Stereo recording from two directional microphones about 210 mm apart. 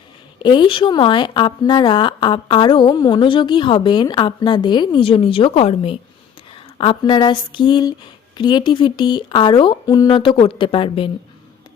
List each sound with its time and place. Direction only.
0.4 s speech: 20° left (ahead or behind)